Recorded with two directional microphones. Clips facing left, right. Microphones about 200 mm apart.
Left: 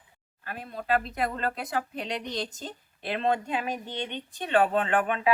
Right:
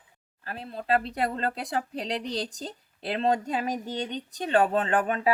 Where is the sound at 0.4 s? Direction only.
30° right (ahead or behind).